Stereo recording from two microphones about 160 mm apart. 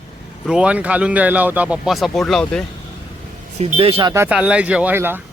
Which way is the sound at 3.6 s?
40° right (ahead or behind).